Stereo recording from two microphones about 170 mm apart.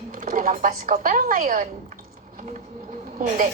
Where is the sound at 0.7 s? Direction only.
40° right (ahead or behind).